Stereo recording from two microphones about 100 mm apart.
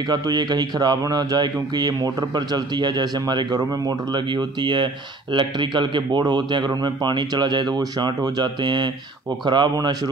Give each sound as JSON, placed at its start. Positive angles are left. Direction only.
{"t": 0.1, "sound": "speech", "side_deg": -45}